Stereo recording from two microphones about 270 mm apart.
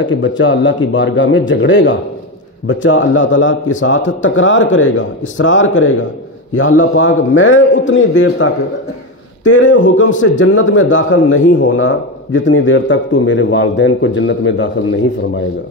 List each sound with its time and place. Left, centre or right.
0.0 s a man's voice: left